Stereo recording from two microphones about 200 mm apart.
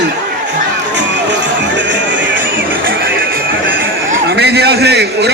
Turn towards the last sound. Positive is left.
turn(degrees=-55)  # may be behind; listen again after turning